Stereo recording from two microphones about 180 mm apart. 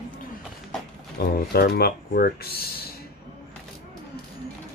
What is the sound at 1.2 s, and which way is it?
Speech, 55° left (ahead or behind).